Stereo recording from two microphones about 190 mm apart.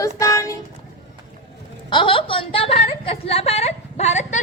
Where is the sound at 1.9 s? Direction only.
25° left (ahead or behind).